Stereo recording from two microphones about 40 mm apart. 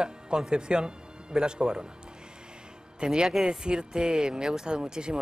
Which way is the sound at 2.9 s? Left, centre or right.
Right.